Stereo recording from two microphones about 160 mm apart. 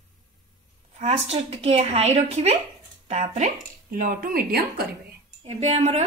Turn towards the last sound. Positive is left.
turn(degrees=-45)  # may be behind; listen again after turning